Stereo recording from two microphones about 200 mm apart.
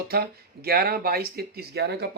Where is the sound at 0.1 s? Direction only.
50° right (ahead or behind).